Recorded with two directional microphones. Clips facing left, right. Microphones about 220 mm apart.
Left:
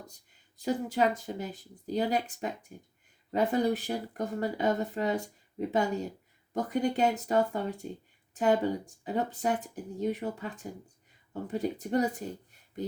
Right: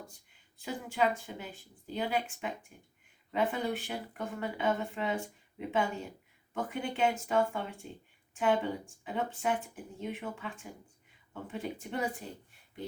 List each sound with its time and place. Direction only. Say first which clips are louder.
0.6 s speech: left 4 dB; 40° left (ahead or behind)